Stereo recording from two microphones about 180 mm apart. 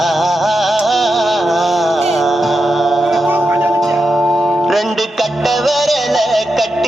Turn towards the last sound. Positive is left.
turn(degrees=0)  # may be behind; listen again after turning